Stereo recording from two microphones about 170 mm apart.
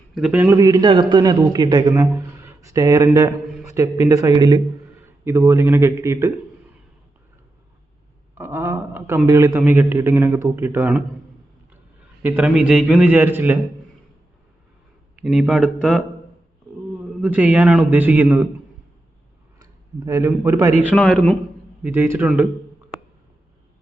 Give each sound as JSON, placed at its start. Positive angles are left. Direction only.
{"t": 0.1, "sound": "a man's voice", "side_deg": -5}
{"t": 8.4, "sound": "a man's voice", "side_deg": -15}
{"t": 12.2, "sound": "a man's voice", "side_deg": -10}
{"t": 15.1, "sound": "speech", "side_deg": -5}
{"t": 17.2, "sound": "a man's voice", "side_deg": -10}
{"t": 20.1, "sound": "a man's voice", "side_deg": -20}
{"t": 20.9, "sound": "speech", "side_deg": 5}
{"t": 21.8, "sound": "a man's voice", "side_deg": -15}